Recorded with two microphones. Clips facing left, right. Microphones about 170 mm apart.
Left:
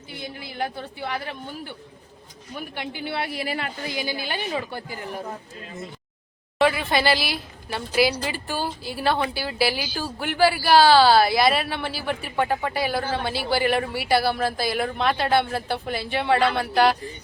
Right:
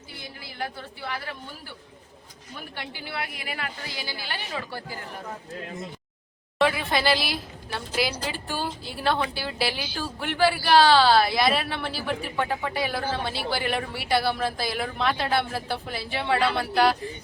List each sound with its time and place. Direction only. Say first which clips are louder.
0.1 s a woman's voice: left 7 dB; 20° left (ahead or behind)
2.7 s a woman's voice: left 5 dB; 20° left (ahead or behind)
3.8 s a woman's voice: left 7 dB; 15° left (ahead or behind)
6.6 s speech: left 3 dB; centre (ahead or behind)